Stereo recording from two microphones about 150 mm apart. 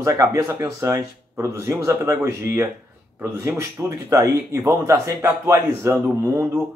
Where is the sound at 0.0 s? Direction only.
20° right (ahead or behind).